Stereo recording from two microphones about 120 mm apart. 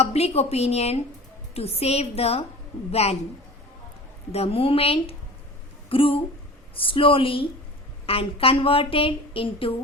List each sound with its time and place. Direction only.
0.0 s a woman's voice: 60° left (ahead or behind)
4.3 s speech: 55° left (ahead or behind)